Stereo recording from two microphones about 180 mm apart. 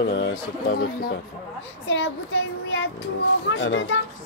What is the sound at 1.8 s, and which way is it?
Speech, 90° left.